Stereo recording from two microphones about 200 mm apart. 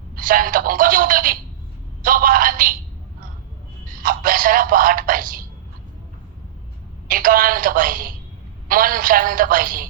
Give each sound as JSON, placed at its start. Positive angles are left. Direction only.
{"t": 0.2, "sound": "a man's voice", "side_deg": -45}
{"t": 3.8, "sound": "a man's voice", "side_deg": -45}
{"t": 7.1, "sound": "a man's voice", "side_deg": -45}